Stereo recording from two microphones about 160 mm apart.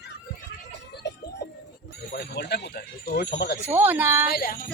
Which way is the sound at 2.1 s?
90° left.